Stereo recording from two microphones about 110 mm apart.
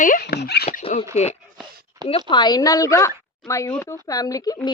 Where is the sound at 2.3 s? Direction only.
40° left (ahead or behind).